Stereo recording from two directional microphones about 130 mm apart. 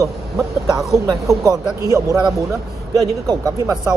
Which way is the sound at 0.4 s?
Centre (ahead or behind).